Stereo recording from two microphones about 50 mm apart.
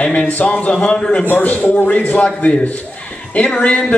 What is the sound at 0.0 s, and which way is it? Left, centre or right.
A man's voice, left.